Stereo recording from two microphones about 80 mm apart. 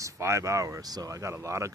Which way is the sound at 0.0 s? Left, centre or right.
Right.